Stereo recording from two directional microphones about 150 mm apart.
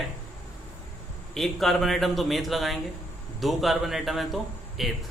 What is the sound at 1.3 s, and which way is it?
A man's voice, centre (ahead or behind).